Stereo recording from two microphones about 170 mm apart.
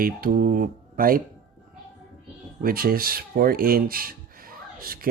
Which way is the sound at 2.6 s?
60° right (ahead or behind).